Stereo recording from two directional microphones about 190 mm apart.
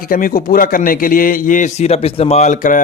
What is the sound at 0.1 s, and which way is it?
Speech, 50° left (ahead or behind).